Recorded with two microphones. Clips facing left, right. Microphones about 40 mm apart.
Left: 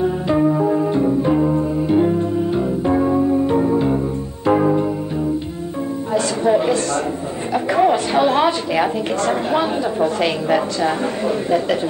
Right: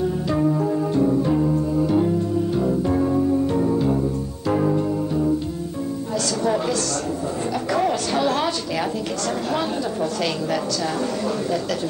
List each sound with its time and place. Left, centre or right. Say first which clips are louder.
0.0 s music: left 4 dB; left
6.1 s music: left 6 dB; left
7.7 s a sound: left 6 dB; left
9.5 s a woman's voice: left 5 dB; left